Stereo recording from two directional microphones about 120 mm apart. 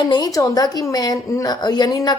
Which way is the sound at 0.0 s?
35° left (ahead or behind).